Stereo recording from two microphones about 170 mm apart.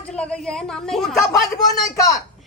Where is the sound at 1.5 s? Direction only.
20° left (ahead or behind).